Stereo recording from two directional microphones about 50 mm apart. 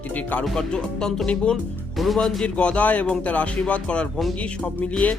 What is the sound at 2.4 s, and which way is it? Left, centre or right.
Speech, left.